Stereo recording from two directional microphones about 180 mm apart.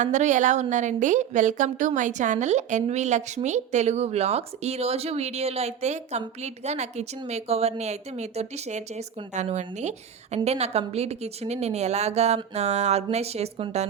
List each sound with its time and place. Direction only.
0.0 s a woman's voice: 40° right (ahead or behind)